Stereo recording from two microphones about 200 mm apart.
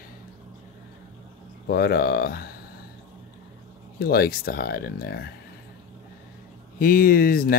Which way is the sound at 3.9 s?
50° left (ahead or behind).